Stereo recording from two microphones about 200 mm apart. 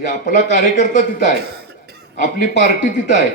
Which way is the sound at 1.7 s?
55° right (ahead or behind).